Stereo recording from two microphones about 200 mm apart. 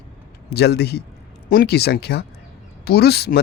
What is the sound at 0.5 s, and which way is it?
Speech, 55° left (ahead or behind).